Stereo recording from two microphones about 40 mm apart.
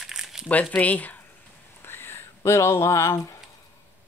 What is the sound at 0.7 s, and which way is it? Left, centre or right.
Speech, left.